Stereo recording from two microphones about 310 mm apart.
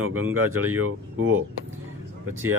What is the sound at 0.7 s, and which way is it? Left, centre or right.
Speech, right.